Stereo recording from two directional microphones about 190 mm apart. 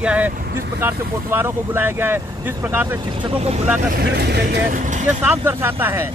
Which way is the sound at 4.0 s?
60° right (ahead or behind).